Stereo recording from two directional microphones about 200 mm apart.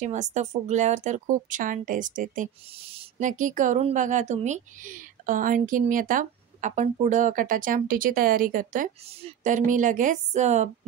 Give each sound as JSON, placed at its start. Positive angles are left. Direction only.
{"t": 0.0, "sound": "speech", "side_deg": -35}